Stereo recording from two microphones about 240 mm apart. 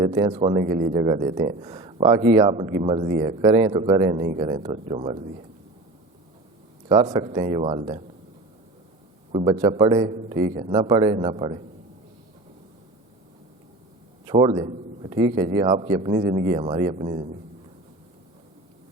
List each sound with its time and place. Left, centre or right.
0.0 s speech: right
7.0 s speech: centre
9.3 s speech: right
14.3 s a man's voice: centre